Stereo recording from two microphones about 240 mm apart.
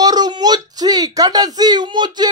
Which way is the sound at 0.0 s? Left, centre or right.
Centre.